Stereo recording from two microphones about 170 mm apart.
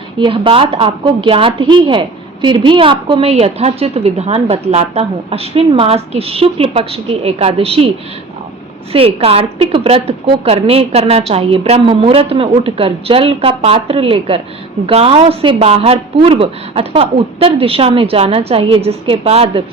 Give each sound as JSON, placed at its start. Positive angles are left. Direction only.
{"t": 0.2, "sound": "a woman's voice", "side_deg": -30}
{"t": 8.9, "sound": "a woman's voice", "side_deg": -35}